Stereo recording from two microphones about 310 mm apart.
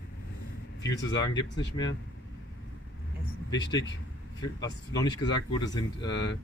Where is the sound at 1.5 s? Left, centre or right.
Left.